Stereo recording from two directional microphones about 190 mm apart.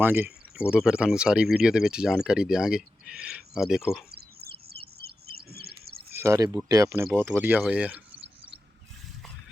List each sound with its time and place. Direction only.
0.0 s speech: 10° right (ahead or behind)
4.1 s chirp: 55° right (ahead or behind)
6.1 s speech: 15° right (ahead or behind)